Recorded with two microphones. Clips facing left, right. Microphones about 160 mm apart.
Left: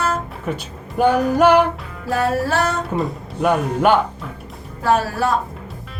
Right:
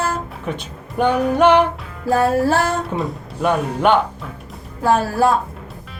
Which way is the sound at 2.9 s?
Centre (ahead or behind).